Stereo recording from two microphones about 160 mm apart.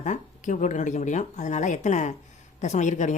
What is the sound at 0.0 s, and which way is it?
Speech, 50° left (ahead or behind).